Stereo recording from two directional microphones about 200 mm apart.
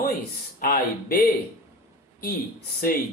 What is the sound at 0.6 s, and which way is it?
Speech, 45° left (ahead or behind).